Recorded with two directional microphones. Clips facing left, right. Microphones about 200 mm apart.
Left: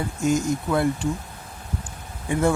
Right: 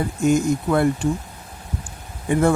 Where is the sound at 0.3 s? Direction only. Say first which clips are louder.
Right 4 dB; 55° right (ahead or behind).